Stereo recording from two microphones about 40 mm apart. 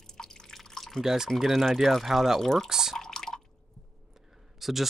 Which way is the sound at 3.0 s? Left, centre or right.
Centre.